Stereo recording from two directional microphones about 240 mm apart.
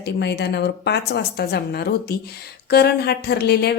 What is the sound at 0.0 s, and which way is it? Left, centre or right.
A woman's voice, left.